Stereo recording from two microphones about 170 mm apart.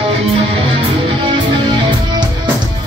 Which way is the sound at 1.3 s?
25° right (ahead or behind).